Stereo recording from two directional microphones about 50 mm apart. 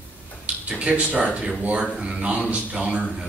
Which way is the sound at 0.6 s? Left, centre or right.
Right.